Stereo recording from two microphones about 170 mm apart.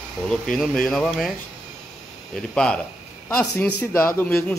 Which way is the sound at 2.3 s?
5° left (ahead or behind).